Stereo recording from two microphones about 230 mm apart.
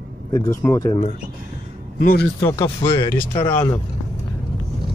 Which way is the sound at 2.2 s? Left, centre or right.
Centre.